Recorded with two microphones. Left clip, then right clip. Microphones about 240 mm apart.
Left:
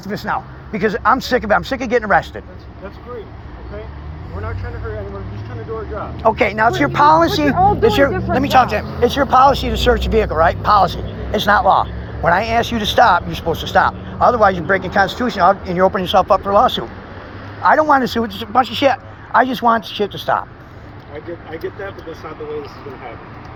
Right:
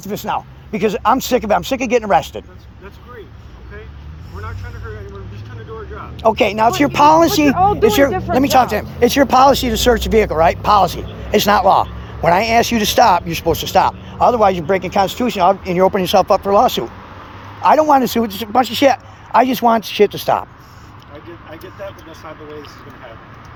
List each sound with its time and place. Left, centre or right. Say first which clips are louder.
0.3 s speech: even; right
6.2 s speech: right 1 dB; right
13.4 s speech: right 3 dB; right
13.7 s speech: left 1 dB; right